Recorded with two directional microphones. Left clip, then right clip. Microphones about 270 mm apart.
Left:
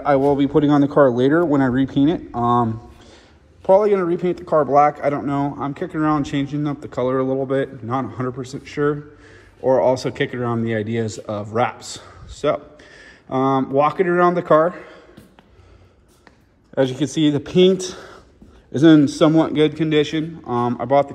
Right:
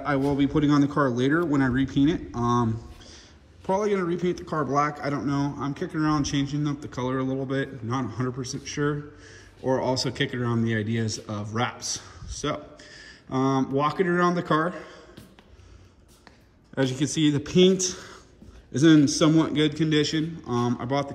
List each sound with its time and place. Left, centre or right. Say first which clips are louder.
0.0 s a man's voice: left 9 dB; centre
14.5 s a sound: left 10 dB; centre
16.8 s a man's voice: left 5 dB; centre